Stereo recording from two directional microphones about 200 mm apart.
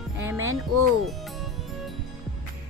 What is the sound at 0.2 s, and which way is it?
Music, 15° right (ahead or behind).